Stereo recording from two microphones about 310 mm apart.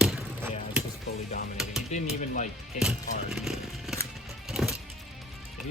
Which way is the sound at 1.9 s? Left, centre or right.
Left.